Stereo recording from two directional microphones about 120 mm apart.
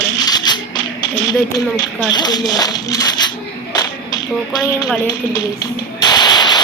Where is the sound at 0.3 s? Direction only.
35° left (ahead or behind).